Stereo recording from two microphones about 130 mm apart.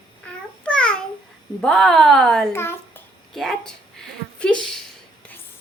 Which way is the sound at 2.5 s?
20° left (ahead or behind).